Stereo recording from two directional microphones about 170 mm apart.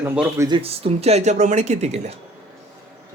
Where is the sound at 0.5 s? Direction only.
35° right (ahead or behind).